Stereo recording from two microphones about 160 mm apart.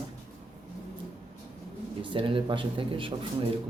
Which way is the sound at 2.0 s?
30° right (ahead or behind).